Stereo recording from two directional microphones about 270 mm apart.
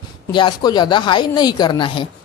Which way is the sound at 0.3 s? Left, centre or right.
Centre.